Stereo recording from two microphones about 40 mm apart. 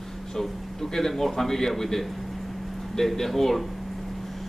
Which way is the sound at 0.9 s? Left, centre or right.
Centre.